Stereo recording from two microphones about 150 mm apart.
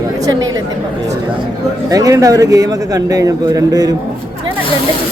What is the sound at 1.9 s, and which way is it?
A man's voice, 25° right (ahead or behind).